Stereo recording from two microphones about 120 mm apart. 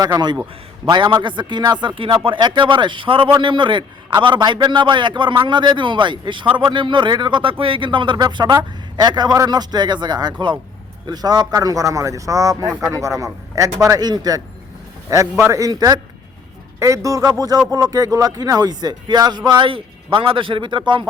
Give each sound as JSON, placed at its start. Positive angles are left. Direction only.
{"t": 0.0, "sound": "a man's voice", "side_deg": -35}